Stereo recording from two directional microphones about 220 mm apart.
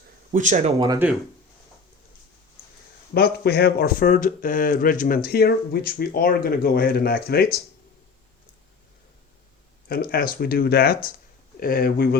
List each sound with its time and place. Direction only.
0.3 s speech: 35° right (ahead or behind)
0.9 s speech: 10° right (ahead or behind)
3.2 s speech: 45° left (ahead or behind)
9.9 s speech: 45° left (ahead or behind)